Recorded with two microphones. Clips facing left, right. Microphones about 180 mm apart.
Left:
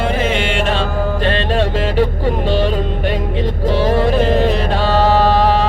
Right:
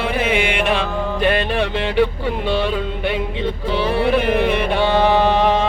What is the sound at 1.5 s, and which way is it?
Music, 40° left (ahead or behind).